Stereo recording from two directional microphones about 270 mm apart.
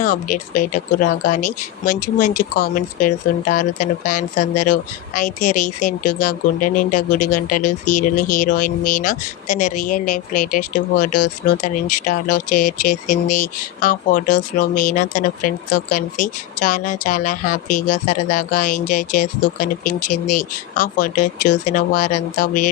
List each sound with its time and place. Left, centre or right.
0.0 s speech: left